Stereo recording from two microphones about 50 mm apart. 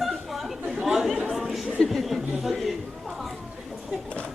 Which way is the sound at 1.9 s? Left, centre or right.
Centre.